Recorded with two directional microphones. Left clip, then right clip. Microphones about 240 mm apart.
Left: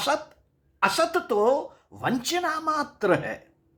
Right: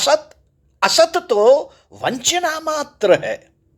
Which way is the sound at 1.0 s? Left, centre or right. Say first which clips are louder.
Right 9 dB; right.